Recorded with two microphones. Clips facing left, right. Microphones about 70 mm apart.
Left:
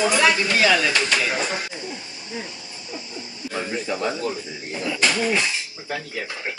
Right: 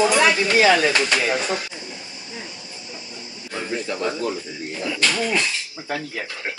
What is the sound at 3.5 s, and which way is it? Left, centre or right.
A man's voice, centre.